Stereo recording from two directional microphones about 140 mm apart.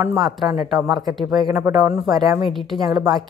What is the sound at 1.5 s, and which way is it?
Speech, 20° right (ahead or behind).